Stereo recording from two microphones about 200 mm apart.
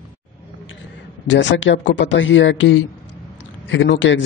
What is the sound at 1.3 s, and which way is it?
A man's voice, 65° left (ahead or behind).